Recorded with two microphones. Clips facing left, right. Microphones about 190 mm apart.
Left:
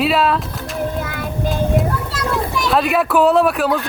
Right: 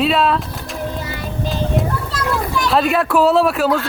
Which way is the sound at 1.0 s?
50° left (ahead or behind).